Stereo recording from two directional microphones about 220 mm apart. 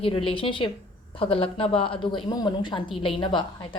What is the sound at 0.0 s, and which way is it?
A woman's voice, 25° left (ahead or behind).